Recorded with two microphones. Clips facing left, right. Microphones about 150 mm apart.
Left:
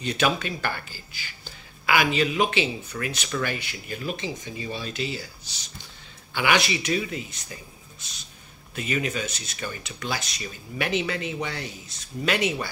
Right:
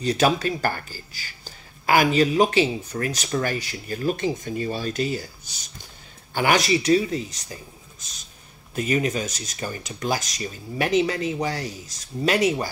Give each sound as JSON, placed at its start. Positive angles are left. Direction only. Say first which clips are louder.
{"t": 0.0, "sound": "speech", "louder": "right 4 dB", "side_deg": -40}
{"t": 8.7, "sound": "speech", "louder": "right 5 dB", "side_deg": -40}